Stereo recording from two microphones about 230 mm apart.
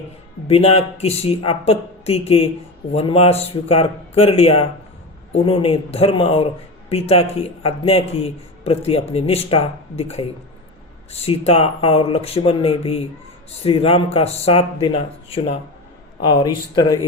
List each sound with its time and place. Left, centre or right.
0.4 s speech: left